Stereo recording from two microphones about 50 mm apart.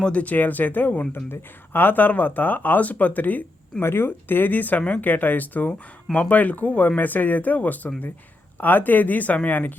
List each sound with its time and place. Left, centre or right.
0.0 s speech: left
3.8 s speech: left